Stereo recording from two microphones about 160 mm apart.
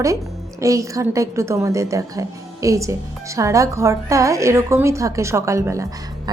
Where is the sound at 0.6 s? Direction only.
20° right (ahead or behind).